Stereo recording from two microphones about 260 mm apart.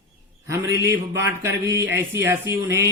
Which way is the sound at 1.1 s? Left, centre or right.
Centre.